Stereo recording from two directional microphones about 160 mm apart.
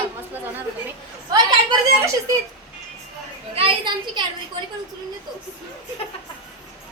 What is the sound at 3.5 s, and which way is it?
Speech, 30° right (ahead or behind).